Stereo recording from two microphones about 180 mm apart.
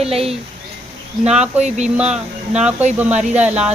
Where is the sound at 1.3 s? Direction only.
5° right (ahead or behind).